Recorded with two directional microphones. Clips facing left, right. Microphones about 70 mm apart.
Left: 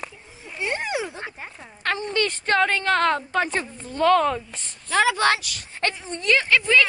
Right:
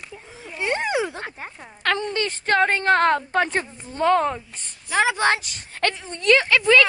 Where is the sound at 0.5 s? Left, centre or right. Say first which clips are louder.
Right 3 dB; right.